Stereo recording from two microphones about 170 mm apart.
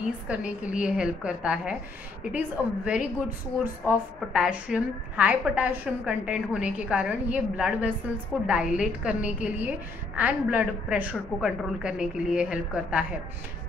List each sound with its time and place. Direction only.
0.3 s a woman's voice: 5° right (ahead or behind)